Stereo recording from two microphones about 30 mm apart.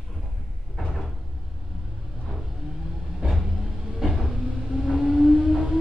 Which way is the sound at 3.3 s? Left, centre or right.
Centre.